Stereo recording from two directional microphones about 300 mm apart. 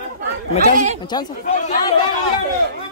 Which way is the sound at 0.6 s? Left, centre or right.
Right.